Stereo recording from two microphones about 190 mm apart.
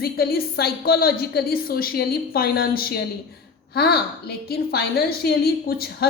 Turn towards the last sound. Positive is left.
turn(degrees=55)  # may be behind; listen again after turning